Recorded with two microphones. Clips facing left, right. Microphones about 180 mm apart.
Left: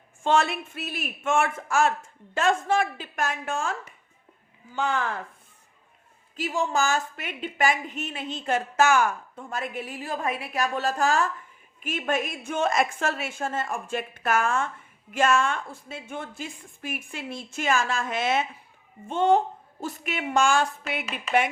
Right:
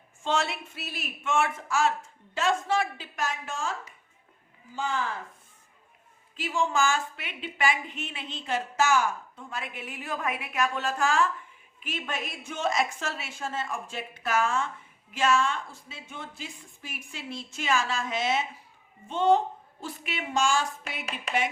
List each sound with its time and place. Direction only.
0.3 s a woman's voice: 55° left (ahead or behind)
6.3 s a woman's voice: 40° left (ahead or behind); by 21.5 s 60° left (ahead or behind)